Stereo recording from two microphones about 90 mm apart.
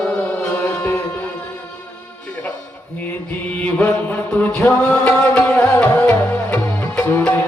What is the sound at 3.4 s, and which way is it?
Chant, 15° left (ahead or behind).